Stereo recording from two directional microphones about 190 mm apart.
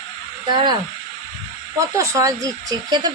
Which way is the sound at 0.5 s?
25° right (ahead or behind).